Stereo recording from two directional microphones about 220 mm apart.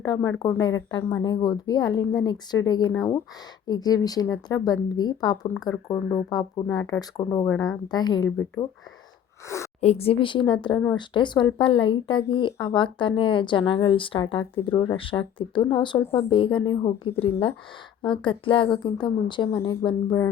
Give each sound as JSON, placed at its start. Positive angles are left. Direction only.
{"t": 0.0, "sound": "speech", "side_deg": 15}
{"t": 9.8, "sound": "speech", "side_deg": 25}